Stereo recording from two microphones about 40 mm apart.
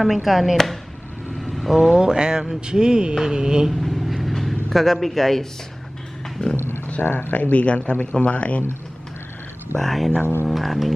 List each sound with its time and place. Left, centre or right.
0.0 s speech: centre
1.4 s vehicle: centre
3.7 s a sound: centre
6.4 s speech: left
7.0 s speech: left
7.5 s speech: left
9.7 s speech: centre